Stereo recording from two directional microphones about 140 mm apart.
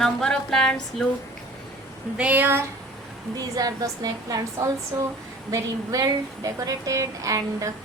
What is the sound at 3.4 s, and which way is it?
A woman's voice, 25° right (ahead or behind).